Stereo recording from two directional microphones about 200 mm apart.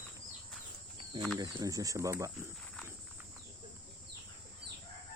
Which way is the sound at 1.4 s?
20° right (ahead or behind).